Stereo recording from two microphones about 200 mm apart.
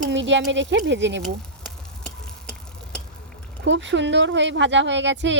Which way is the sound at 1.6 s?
5° left (ahead or behind).